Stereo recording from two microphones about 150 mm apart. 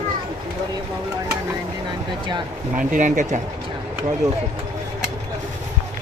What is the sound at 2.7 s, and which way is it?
Speech, 60° right (ahead or behind).